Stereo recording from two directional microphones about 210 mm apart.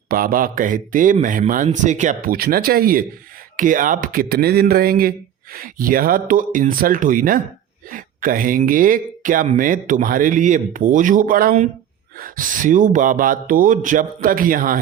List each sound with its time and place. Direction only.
0.1 s speech: 45° right (ahead or behind)